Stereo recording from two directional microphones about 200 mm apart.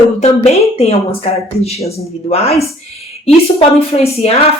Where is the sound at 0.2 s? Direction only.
35° left (ahead or behind).